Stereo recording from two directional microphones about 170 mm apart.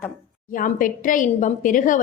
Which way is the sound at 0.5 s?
50° left (ahead or behind).